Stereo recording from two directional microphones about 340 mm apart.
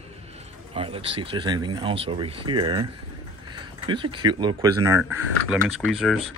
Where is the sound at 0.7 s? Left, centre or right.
Centre.